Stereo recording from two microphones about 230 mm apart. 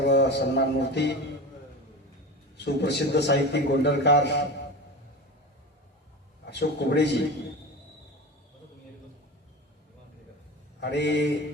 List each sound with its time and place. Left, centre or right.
0.0 s a man's voice: left
2.6 s a man's voice: left
6.5 s a man's voice: left
10.8 s speech: left